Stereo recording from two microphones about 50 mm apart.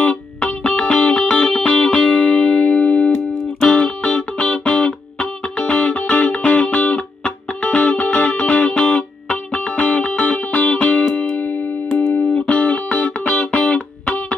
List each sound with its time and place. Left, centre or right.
0.0 s music: left
12.4 s music: left